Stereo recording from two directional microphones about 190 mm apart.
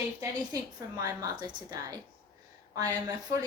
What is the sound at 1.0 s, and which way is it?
A woman's voice, 20° right (ahead or behind).